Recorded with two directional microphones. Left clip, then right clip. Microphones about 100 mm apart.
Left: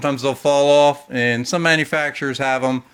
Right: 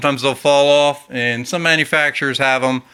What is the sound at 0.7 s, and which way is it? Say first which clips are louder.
Speech: even; 30° left (ahead or behind).